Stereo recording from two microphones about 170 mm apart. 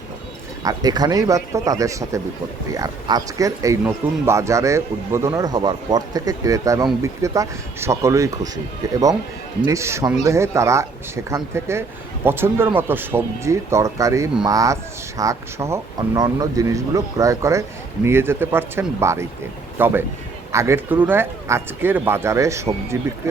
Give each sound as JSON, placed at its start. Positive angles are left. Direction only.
{"t": 0.6, "sound": "speech", "side_deg": -20}